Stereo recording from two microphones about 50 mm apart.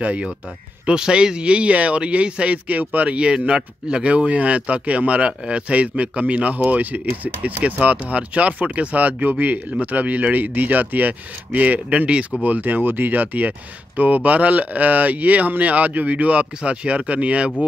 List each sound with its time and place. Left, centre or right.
0.0 s speech: right